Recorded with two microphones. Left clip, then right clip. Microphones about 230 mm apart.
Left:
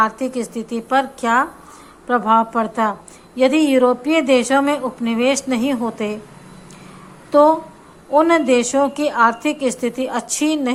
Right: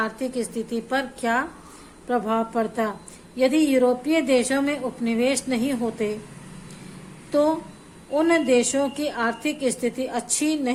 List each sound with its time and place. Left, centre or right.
0.0 s speech: centre
7.3 s a woman's voice: centre